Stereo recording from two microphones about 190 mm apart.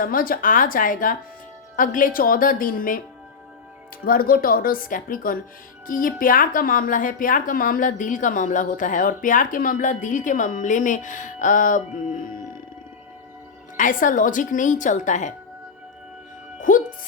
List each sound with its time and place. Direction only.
0.0 s a woman's voice: 50° left (ahead or behind)
4.0 s a woman's voice: 50° left (ahead or behind)
13.7 s a woman's voice: 45° left (ahead or behind)
16.6 s music: 45° left (ahead or behind)